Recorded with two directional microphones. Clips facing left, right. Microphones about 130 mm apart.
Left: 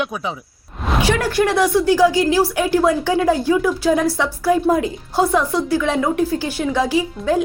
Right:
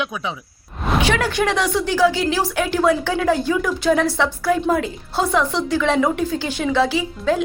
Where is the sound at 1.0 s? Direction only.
10° left (ahead or behind).